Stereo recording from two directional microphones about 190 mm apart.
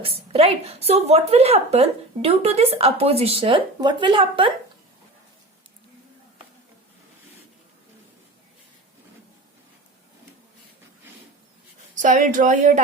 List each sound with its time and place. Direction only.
0.0 s a woman's voice: 30° right (ahead or behind)
11.9 s a woman's voice: 40° right (ahead or behind)